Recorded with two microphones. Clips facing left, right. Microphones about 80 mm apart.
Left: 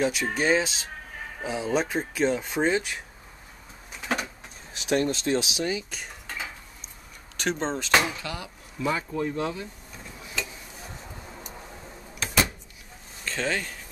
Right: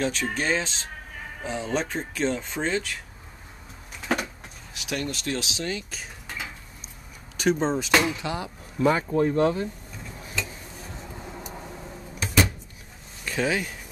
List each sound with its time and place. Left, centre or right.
0.0 s speech: centre
4.7 s speech: left; by 6.0 s centre
6.2 s dishes: centre
7.3 s speech: centre
7.9 s speech: centre
8.2 s speech: right
8.8 s speech: right
13.2 s speech: centre